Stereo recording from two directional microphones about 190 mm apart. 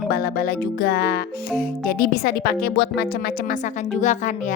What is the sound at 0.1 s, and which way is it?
Music, 50° left (ahead or behind).